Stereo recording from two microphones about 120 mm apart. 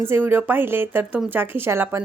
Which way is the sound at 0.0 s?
20° right (ahead or behind).